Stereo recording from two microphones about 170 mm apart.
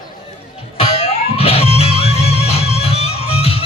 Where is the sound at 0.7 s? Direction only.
35° left (ahead or behind).